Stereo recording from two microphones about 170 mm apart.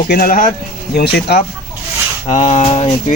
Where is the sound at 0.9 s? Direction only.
70° left (ahead or behind).